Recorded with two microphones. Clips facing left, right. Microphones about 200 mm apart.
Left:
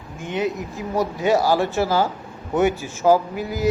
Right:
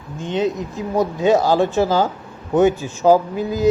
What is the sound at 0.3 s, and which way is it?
Speech, 20° right (ahead or behind).